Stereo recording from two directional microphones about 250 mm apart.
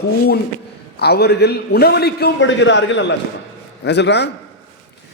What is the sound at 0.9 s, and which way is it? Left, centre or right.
A man's voice, left.